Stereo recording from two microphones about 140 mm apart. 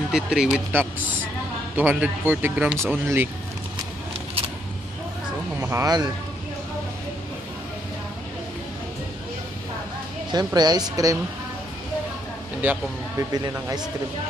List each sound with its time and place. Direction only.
0.1 s speech: 5° right (ahead or behind)
5.6 s speech: 20° right (ahead or behind)
10.3 s speech: 30° right (ahead or behind)
12.6 s speech: 15° right (ahead or behind)